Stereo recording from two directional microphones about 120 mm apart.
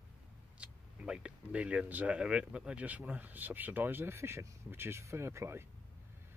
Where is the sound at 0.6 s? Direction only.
10° right (ahead or behind).